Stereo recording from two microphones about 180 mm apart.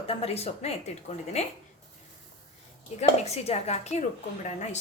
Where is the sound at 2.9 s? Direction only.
35° left (ahead or behind).